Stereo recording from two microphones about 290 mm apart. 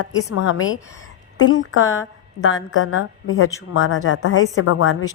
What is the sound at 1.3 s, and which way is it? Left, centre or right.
A woman's voice, left.